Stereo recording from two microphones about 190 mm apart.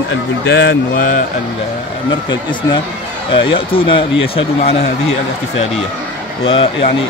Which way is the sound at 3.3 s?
30° left (ahead or behind).